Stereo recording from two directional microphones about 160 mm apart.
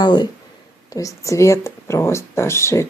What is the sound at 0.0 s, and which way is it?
Speech, 25° left (ahead or behind).